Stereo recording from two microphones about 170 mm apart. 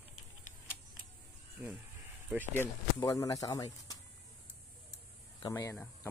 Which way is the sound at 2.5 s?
15° left (ahead or behind).